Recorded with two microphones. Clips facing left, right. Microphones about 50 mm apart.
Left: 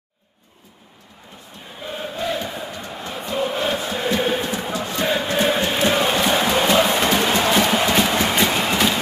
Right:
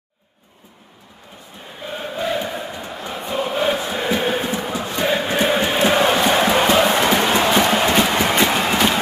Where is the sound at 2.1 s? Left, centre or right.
Centre.